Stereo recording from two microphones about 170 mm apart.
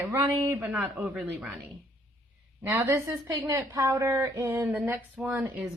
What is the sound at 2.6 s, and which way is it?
A woman's voice, 15° right (ahead or behind).